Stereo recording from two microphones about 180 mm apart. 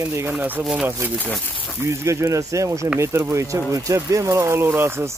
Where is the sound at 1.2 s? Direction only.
10° left (ahead or behind).